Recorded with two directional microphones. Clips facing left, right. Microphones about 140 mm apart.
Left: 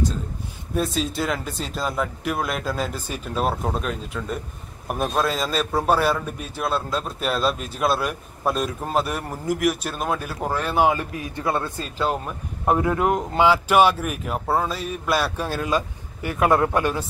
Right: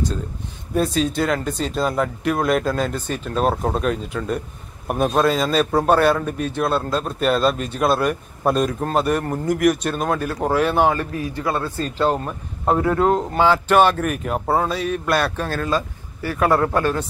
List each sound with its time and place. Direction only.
0.7 s a man's voice: centre (ahead or behind)
10.8 s speech: 15° left (ahead or behind)
12.0 s speech: 10° left (ahead or behind)